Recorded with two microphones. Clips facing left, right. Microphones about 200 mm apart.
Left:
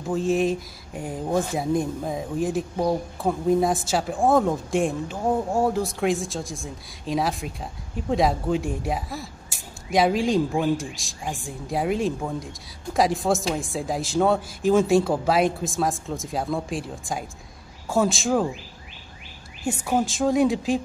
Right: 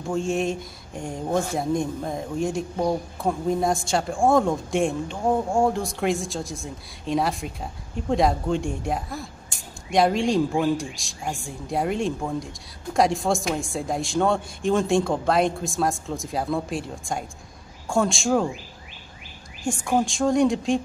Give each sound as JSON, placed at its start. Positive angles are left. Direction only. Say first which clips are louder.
{"t": 0.0, "sound": "speech", "louder": "left 2 dB", "side_deg": 0}
{"t": 19.6, "sound": "speech", "louder": "right 1 dB", "side_deg": 5}